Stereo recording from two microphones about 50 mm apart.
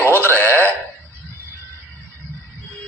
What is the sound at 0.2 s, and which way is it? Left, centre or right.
Wail, right.